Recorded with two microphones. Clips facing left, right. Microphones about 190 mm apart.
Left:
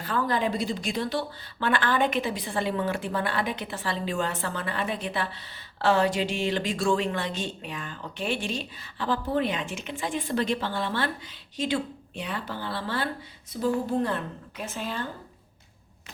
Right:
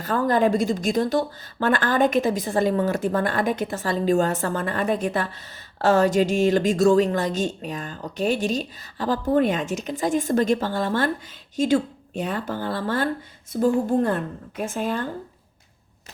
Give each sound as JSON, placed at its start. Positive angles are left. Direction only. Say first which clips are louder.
{"t": 0.0, "sound": "a woman's voice", "louder": "right 6 dB", "side_deg": -45}